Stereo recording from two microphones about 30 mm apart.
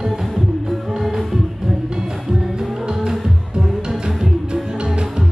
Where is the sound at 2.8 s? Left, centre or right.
Right.